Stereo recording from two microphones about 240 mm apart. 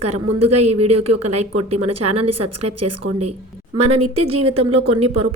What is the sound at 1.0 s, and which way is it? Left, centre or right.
Speech, right.